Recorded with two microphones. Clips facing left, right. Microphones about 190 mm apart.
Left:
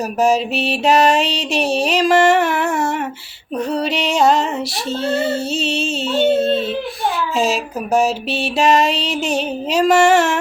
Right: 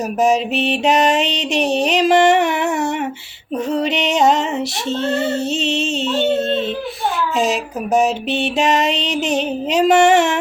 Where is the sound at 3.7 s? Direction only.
20° right (ahead or behind).